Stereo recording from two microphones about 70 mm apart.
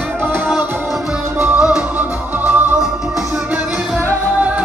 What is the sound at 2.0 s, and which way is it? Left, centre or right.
Music, right.